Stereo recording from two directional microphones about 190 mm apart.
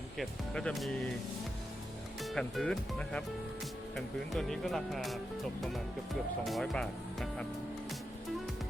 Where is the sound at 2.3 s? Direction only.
5° left (ahead or behind).